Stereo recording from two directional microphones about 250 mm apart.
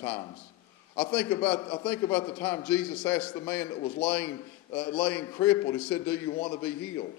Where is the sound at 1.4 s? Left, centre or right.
Left.